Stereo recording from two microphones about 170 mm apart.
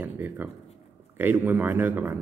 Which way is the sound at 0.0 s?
10° right (ahead or behind).